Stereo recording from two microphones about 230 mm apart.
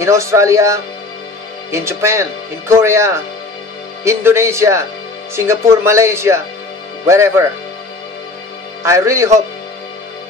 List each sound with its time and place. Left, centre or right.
0.0 s speech: centre
8.8 s speech: centre